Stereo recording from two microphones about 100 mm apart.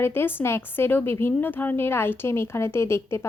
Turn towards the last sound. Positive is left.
turn(degrees=25)  # may be behind; listen again after turning